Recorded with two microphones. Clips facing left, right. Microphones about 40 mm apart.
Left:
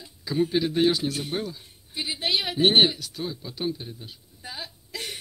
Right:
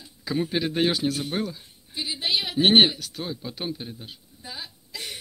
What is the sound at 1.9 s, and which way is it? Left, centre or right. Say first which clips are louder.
Speech: even; left.